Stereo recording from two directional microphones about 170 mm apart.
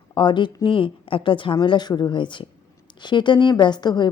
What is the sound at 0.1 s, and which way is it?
A woman's voice, 30° left (ahead or behind).